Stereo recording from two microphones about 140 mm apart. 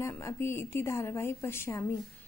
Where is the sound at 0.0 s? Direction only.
20° left (ahead or behind).